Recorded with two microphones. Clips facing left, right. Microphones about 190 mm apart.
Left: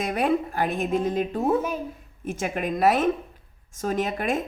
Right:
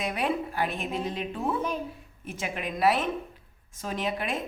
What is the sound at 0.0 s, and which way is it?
A woman's voice, 45° left (ahead or behind).